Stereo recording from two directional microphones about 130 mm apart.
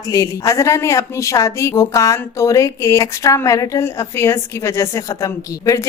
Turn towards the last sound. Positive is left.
turn(degrees=25)  # may be behind; listen again after turning